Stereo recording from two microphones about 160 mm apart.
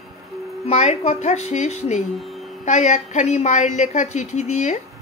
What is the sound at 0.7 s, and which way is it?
A woman's voice, 40° left (ahead or behind).